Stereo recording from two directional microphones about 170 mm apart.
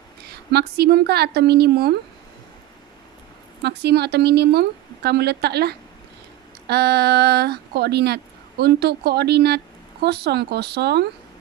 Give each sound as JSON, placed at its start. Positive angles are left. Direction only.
{"t": 0.3, "sound": "speech", "side_deg": -70}
{"t": 3.6, "sound": "speech", "side_deg": -75}